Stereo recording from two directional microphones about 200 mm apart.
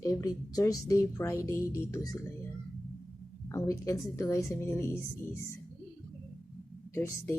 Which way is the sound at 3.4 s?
15° left (ahead or behind).